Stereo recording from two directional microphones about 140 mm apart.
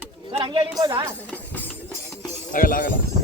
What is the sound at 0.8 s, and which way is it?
Speech, 35° right (ahead or behind).